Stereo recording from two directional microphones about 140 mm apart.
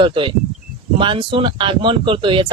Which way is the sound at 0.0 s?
35° right (ahead or behind).